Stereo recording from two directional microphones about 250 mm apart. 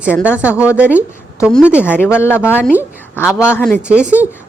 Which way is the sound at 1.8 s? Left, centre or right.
Centre.